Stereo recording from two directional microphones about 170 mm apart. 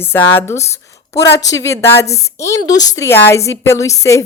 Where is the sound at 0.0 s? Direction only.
15° left (ahead or behind).